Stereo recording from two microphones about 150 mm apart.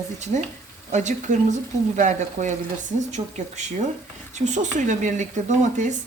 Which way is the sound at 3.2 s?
35° right (ahead or behind).